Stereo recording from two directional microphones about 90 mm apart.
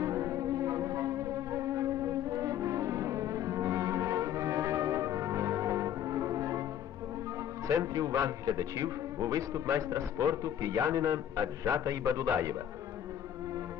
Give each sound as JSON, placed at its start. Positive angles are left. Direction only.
{"t": 0.0, "sound": "music", "side_deg": -40}
{"t": 7.7, "sound": "a man's voice", "side_deg": -40}